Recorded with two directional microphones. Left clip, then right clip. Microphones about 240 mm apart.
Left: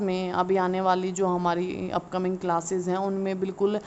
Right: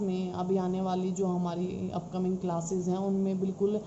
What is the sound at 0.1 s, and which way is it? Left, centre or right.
A woman's voice, left.